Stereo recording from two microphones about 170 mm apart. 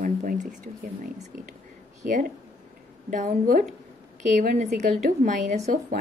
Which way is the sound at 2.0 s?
50° right (ahead or behind).